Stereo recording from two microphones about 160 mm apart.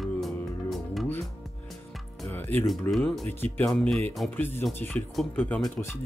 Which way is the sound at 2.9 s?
Centre (ahead or behind).